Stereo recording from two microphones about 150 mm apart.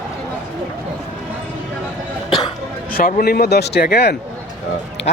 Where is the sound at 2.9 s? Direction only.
75° left (ahead or behind).